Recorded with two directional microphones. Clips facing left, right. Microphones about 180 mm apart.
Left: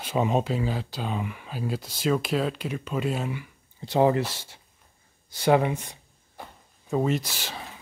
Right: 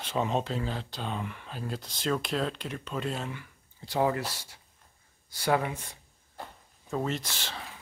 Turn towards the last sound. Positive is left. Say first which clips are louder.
# left 6 dB
turn(degrees=10)  # may be behind; listen again after turning